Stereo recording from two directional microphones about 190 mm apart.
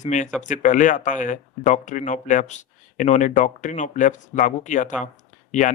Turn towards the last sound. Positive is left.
turn(degrees=40)  # may be behind; listen again after turning